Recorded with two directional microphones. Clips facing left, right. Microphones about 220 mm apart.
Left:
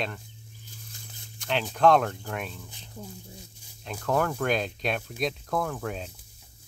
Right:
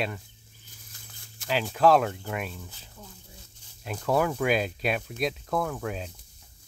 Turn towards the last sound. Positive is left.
turn(degrees=0)  # may be behind; listen again after turning